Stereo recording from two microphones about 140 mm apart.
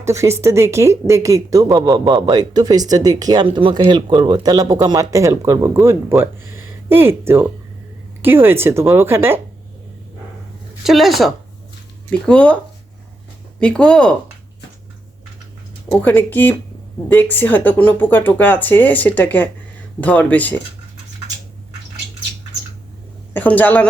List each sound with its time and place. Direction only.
0.0 s a woman's voice: 20° right (ahead or behind)
10.8 s speech: centre (ahead or behind)
13.6 s speech: 5° left (ahead or behind)
15.9 s speech: 15° left (ahead or behind)
23.3 s speech: 10° left (ahead or behind)